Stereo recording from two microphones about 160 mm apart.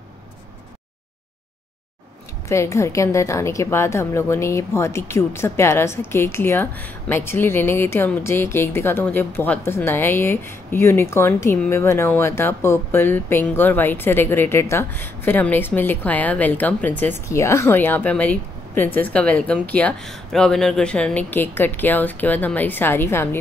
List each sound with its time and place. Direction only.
2.4 s speech: 20° left (ahead or behind)